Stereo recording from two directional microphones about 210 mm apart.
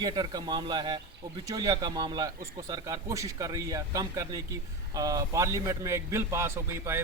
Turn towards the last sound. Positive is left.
turn(degrees=-10)  # may be behind; listen again after turning